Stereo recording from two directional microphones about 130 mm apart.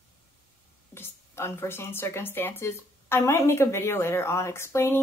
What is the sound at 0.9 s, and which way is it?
Speech, 20° left (ahead or behind).